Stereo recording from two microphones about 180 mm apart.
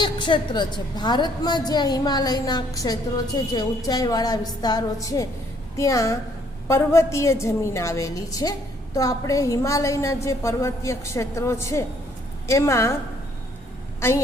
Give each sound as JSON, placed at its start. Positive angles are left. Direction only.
{"t": 0.0, "sound": "a woman's voice", "side_deg": 25}